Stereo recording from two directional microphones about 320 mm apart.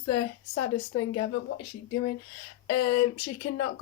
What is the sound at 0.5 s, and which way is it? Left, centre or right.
Speech, left.